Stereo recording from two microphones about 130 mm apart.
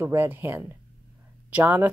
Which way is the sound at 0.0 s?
15° right (ahead or behind).